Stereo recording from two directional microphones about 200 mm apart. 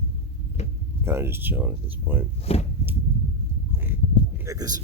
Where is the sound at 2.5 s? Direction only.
30° left (ahead or behind).